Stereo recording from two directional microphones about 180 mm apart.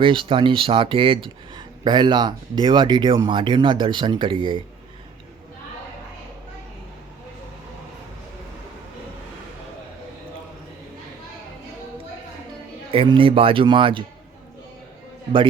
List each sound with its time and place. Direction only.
0.0 s speech: 30° right (ahead or behind)
12.9 s speech: 30° right (ahead or behind)